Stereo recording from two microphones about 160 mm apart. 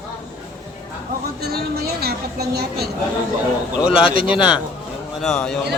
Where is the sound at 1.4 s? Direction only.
75° right (ahead or behind).